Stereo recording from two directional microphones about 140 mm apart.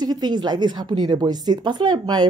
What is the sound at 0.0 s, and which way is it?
A woman's voice, 30° right (ahead or behind).